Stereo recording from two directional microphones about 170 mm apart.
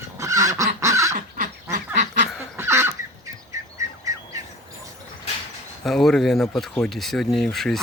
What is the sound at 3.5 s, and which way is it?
Bird, 20° right (ahead or behind).